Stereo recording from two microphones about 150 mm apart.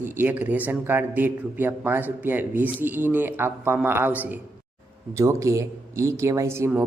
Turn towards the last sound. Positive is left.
turn(degrees=-15)  # may be behind; listen again after turning